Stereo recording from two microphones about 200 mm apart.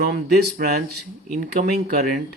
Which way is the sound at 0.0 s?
55° right (ahead or behind).